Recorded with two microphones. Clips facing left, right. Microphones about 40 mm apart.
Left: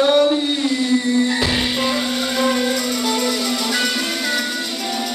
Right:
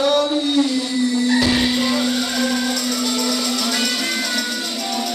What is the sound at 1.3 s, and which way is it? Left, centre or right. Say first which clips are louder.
Music: right 3 dB; centre.